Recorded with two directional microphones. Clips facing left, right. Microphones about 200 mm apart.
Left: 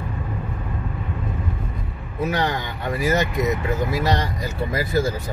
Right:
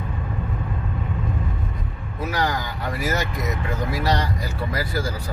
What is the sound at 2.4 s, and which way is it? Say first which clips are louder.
Speech: left 1 dB; 20° left (ahead or behind).